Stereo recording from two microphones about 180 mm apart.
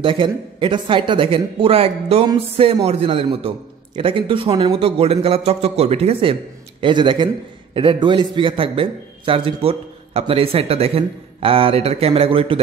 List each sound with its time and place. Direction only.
0.0 s a man's voice: 30° right (ahead or behind)